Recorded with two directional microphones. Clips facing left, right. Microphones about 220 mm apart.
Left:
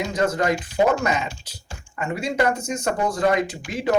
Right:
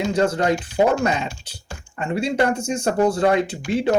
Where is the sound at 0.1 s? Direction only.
30° right (ahead or behind).